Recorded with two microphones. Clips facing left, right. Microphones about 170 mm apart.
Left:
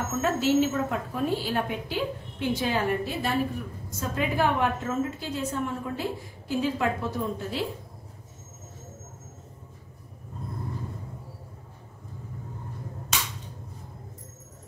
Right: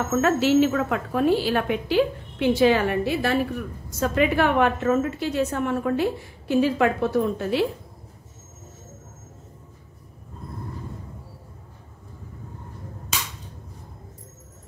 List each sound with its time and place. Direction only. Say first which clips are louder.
0.1 s a woman's voice: right 5 dB; 80° right